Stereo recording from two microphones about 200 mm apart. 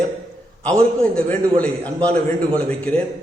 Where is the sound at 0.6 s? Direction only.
5° left (ahead or behind).